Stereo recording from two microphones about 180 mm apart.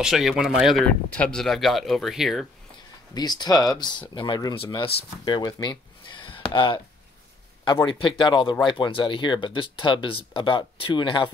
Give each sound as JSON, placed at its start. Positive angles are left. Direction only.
{"t": 0.0, "sound": "speech", "side_deg": 0}
{"t": 3.2, "sound": "speech", "side_deg": 20}